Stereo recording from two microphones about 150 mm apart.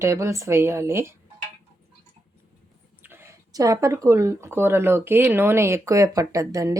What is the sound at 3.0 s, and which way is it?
Speech, 15° right (ahead or behind).